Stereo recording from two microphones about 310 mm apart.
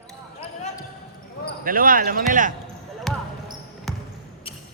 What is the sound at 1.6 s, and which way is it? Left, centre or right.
Speech, right.